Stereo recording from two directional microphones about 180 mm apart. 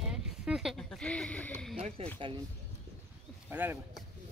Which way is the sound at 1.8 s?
35° right (ahead or behind).